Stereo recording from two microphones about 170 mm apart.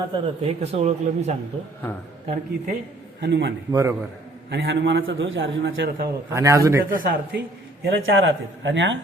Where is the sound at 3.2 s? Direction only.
90° right.